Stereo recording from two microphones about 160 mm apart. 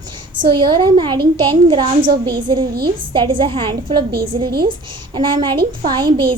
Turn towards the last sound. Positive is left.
turn(degrees=-30)  # may be behind; listen again after turning